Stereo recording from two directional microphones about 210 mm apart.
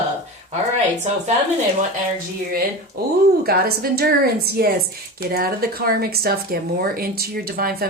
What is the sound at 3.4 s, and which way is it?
Speech, 50° right (ahead or behind).